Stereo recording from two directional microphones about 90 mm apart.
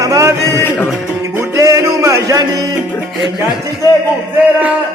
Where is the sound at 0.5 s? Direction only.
25° left (ahead or behind).